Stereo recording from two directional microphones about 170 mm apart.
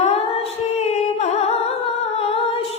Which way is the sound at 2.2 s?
35° left (ahead or behind).